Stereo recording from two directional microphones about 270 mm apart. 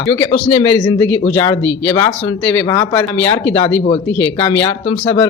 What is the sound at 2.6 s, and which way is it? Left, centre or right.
Speech, centre.